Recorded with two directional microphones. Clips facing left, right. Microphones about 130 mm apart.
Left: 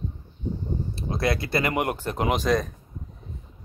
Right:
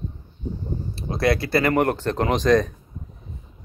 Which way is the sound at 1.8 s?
10° left (ahead or behind).